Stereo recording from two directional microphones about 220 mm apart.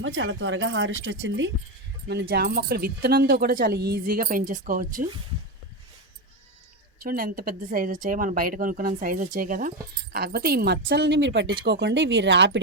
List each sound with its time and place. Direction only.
0.0 s speech: 60° right (ahead or behind)
2.3 s speech: 45° right (ahead or behind)
7.0 s speech: 40° right (ahead or behind)